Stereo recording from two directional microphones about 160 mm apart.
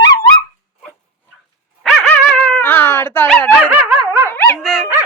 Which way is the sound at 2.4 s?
10° left (ahead or behind).